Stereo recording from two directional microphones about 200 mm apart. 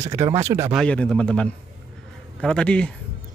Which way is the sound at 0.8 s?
5° left (ahead or behind).